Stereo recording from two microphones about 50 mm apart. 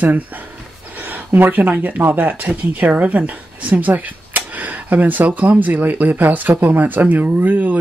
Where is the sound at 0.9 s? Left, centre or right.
Right.